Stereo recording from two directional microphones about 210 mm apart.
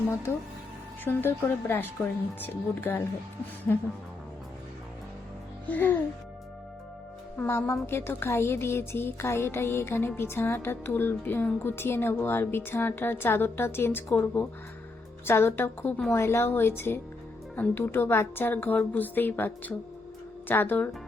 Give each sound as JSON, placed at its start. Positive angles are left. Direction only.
{"t": 1.0, "sound": "a woman's voice", "side_deg": 10}
{"t": 5.6, "sound": "a woman's voice", "side_deg": 10}
{"t": 7.3, "sound": "a woman's voice", "side_deg": 10}